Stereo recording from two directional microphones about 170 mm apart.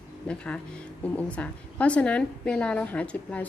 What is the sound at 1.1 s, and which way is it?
A woman's voice, 5° left (ahead or behind).